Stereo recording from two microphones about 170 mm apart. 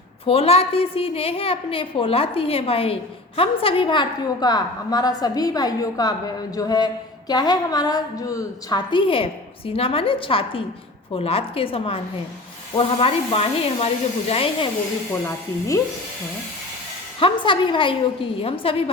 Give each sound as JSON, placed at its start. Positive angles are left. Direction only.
{"t": 0.3, "sound": "a woman's voice", "side_deg": 35}
{"t": 15.3, "sound": "a woman's voice", "side_deg": 20}
{"t": 17.2, "sound": "a woman's voice", "side_deg": 30}